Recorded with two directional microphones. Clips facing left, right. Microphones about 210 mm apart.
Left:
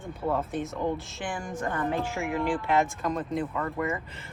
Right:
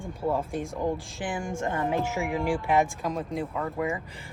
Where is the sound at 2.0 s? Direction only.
50° right (ahead or behind).